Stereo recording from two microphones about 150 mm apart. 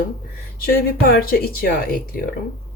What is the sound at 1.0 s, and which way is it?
Speech, 85° left.